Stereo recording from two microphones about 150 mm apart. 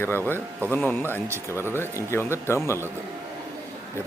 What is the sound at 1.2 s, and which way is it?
Speech, 15° right (ahead or behind).